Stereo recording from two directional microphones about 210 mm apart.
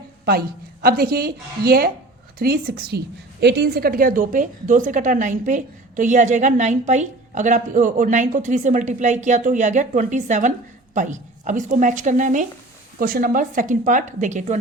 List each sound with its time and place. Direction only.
0.3 s a woman's voice: 45° right (ahead or behind)